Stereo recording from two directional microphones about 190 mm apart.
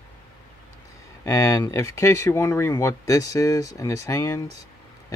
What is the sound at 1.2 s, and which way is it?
Speech, 15° left (ahead or behind).